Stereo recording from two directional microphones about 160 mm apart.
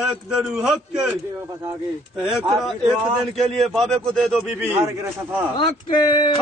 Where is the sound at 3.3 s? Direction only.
Centre (ahead or behind).